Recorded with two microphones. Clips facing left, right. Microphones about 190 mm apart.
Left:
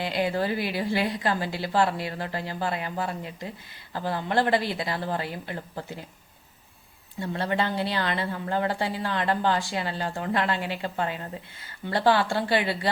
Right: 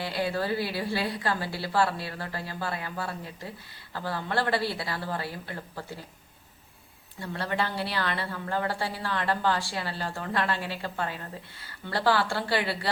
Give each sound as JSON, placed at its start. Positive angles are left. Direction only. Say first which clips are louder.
{"t": 0.0, "sound": "a woman's voice", "louder": "left 3 dB", "side_deg": 20}
{"t": 7.2, "sound": "a woman's voice", "louder": "left 3 dB", "side_deg": 25}